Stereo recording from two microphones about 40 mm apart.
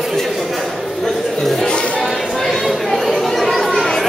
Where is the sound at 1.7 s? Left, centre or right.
Left.